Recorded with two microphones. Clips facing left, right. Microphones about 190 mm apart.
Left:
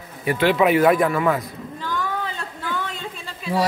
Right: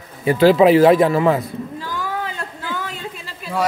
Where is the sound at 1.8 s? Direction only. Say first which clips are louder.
Left 3 dB; 5° right (ahead or behind).